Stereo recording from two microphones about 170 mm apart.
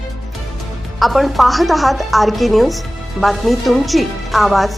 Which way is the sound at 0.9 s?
Centre (ahead or behind).